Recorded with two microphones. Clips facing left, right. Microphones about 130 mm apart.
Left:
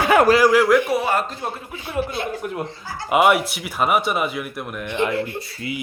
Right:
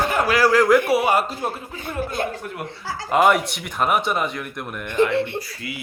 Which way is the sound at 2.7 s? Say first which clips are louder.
Right 2 dB; 90° right.